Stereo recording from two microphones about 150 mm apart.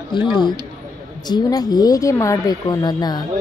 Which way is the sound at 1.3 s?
25° left (ahead or behind).